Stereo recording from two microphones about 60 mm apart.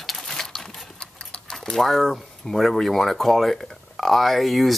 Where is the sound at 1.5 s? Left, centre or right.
Centre.